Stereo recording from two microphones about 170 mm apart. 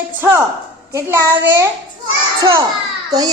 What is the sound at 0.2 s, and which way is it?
A woman's voice, 10° right (ahead or behind).